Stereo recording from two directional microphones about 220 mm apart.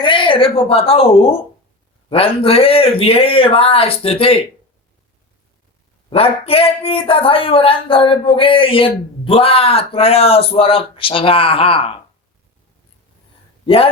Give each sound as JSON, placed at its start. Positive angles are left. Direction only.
{"t": 0.0, "sound": "a man's voice", "side_deg": 20}
{"t": 6.1, "sound": "a man's voice", "side_deg": 25}
{"t": 13.7, "sound": "a man's voice", "side_deg": 25}